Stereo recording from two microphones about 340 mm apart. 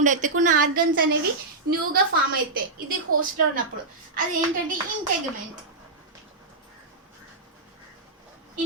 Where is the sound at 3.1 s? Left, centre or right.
Right.